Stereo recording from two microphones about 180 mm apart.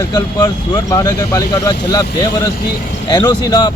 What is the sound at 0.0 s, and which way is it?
Speech, 20° left (ahead or behind).